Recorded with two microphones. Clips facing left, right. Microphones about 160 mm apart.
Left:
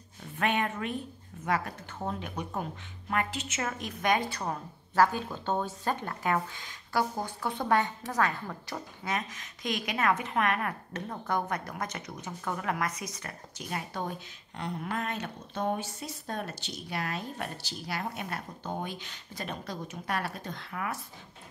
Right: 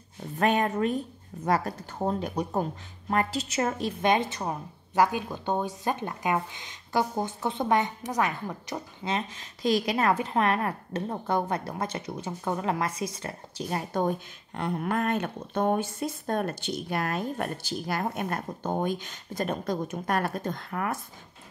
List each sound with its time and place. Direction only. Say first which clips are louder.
0.4 s a woman's voice: right 6 dB; 40° right (ahead or behind)
14.0 s speech: right 9 dB; 55° right (ahead or behind)